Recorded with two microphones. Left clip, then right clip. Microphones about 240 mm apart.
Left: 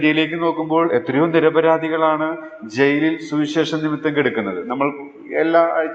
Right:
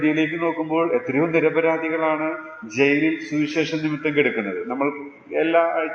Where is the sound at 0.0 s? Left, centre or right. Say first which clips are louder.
Left 4 dB; left.